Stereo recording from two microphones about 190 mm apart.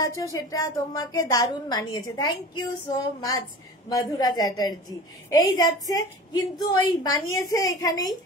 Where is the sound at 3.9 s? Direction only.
20° left (ahead or behind).